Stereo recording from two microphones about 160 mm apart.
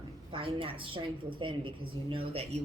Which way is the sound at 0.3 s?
35° right (ahead or behind).